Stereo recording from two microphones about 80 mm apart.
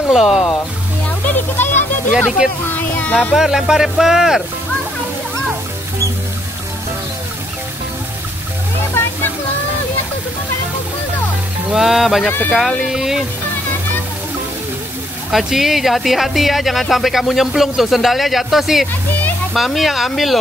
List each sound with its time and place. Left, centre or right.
0.1 s speech: centre
1.0 s music: left
2.4 s speech: centre
2.8 s speech: left
3.3 s speech: centre
9.0 s music: left
11.7 s speech: centre
12.3 s speech: left
12.5 s speech: centre
15.3 s speech: centre